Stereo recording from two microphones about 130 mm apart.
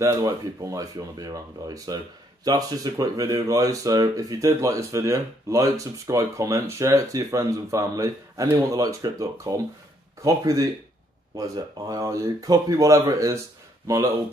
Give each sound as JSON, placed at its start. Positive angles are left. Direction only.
{"t": 0.0, "sound": "speech", "side_deg": -25}